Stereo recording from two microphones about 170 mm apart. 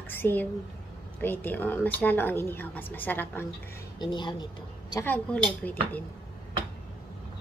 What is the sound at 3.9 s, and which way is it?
Speech, 25° left (ahead or behind).